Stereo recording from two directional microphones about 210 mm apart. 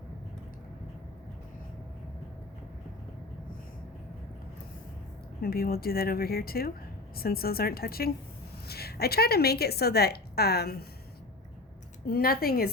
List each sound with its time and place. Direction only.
5.4 s a woman's voice: 45° left (ahead or behind)
12.0 s a woman's voice: 45° left (ahead or behind)